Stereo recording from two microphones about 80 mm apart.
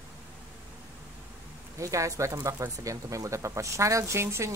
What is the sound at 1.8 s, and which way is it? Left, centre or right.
Speech, right.